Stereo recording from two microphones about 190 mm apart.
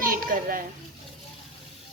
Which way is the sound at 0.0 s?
50° right (ahead or behind).